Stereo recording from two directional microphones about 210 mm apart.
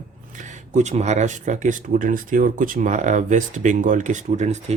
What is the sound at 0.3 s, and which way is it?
Speech, 35° right (ahead or behind).